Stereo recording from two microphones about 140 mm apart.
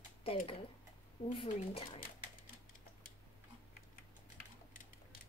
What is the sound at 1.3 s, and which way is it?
Speech, 40° left (ahead or behind).